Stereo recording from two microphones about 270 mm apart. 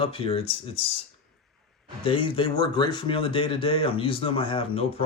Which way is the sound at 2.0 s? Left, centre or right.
Centre.